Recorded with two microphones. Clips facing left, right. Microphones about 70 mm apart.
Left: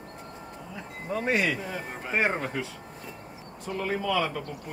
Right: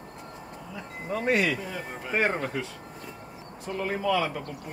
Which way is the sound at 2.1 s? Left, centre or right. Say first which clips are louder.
Right 1 dB; centre.